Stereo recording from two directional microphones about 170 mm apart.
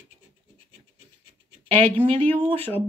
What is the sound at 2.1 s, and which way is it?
Speech, 35° right (ahead or behind).